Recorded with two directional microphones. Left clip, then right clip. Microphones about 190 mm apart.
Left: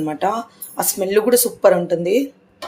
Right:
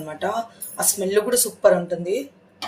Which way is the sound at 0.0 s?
40° left (ahead or behind).